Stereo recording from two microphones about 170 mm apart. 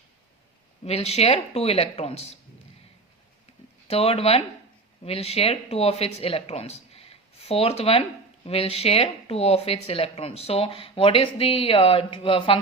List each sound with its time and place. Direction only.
0.9 s speech: 35° left (ahead or behind)
3.8 s speech: 35° left (ahead or behind)